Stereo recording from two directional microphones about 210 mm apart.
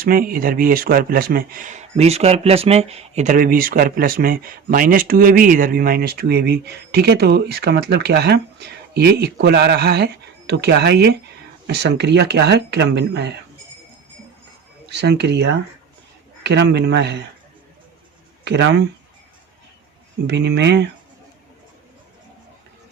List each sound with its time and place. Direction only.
0.0 s speech: 45° right (ahead or behind)
14.8 s speech: 55° right (ahead or behind)
18.4 s speech: 55° right (ahead or behind)
20.2 s speech: 55° right (ahead or behind)